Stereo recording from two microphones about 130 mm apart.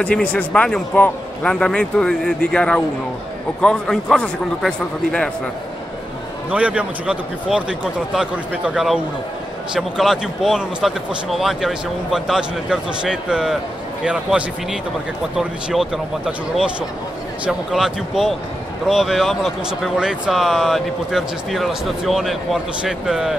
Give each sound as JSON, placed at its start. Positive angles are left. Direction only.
{"t": 0.0, "sound": "a man's voice", "side_deg": 10}
{"t": 6.5, "sound": "speech", "side_deg": -10}